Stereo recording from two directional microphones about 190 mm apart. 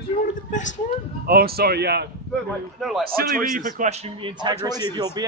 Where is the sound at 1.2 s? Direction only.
55° right (ahead or behind).